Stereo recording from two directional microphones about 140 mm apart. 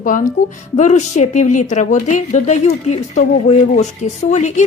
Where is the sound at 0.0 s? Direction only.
75° left (ahead or behind).